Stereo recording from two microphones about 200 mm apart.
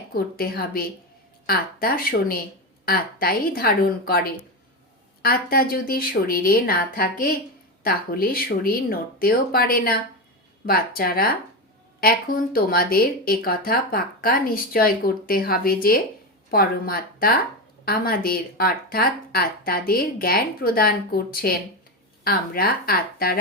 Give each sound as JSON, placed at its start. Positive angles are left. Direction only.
{"t": 0.1, "sound": "speech", "side_deg": 50}